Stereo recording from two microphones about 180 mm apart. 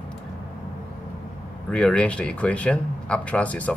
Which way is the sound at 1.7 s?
5° left (ahead or behind).